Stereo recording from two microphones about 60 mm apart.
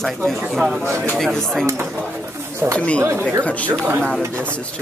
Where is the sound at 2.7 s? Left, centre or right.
Centre.